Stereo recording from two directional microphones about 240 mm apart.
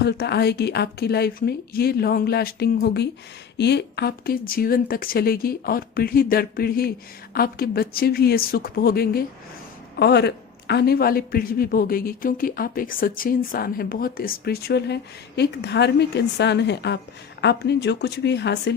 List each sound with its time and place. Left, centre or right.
0.0 s speech: left